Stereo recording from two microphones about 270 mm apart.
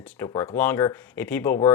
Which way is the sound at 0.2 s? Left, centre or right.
Centre.